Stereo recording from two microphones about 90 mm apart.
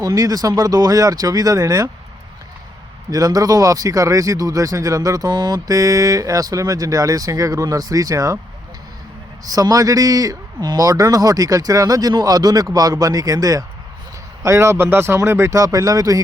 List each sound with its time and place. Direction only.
0.0 s speech: 40° right (ahead or behind)
3.1 s speech: 40° right (ahead or behind)
9.4 s speech: 40° right (ahead or behind)
14.4 s speech: 30° right (ahead or behind)